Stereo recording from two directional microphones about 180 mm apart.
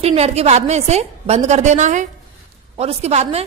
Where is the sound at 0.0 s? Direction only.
35° right (ahead or behind).